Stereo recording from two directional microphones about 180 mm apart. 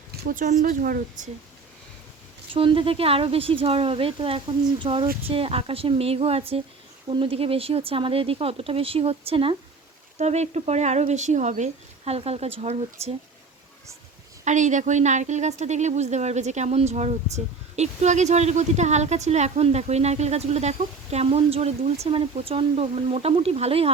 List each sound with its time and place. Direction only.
0.2 s speech: 50° right (ahead or behind)
2.5 s a woman's voice: 30° right (ahead or behind)
14.4 s a woman's voice: 40° right (ahead or behind)